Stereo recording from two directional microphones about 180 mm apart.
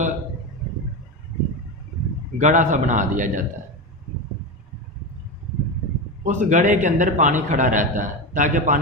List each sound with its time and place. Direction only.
2.4 s a man's voice: 45° right (ahead or behind)
6.2 s a man's voice: 45° right (ahead or behind)